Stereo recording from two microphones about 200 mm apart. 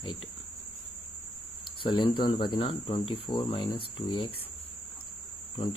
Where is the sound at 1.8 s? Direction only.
25° left (ahead or behind).